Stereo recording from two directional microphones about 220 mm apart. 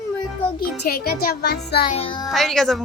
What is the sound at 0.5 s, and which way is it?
Music, 45° left (ahead or behind).